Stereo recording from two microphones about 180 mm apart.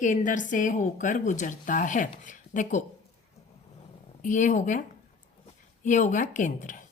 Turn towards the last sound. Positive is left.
turn(degrees=45)  # may be behind; listen again after turning